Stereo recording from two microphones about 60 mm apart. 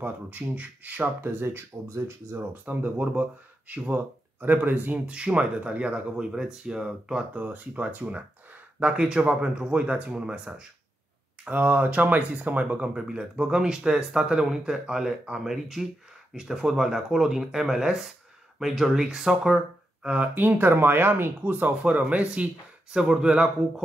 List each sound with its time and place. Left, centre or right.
0.0 s speech: right
2.5 s speech: right; by 7.2 s centre
7.3 s speech: right
12.9 s speech: centre
20.1 s speech: right